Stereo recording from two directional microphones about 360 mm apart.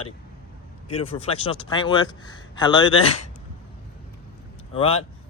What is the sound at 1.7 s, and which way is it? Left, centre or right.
Speech, centre.